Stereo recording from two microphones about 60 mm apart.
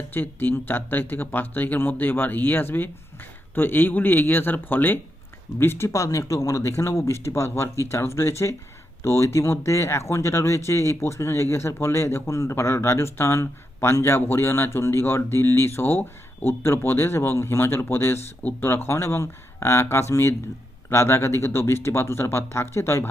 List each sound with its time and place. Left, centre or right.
0.1 s speech: left
5.5 s speech: left